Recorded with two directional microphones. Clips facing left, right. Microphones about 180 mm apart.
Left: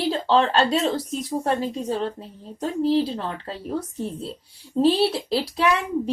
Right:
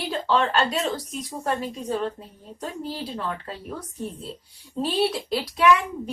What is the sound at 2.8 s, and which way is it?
Speech, 30° left (ahead or behind).